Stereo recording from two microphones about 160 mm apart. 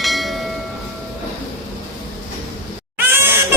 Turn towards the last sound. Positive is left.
turn(degrees=-15)  # may be behind; listen again after turning